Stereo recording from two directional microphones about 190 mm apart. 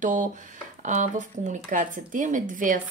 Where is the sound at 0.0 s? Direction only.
40° right (ahead or behind).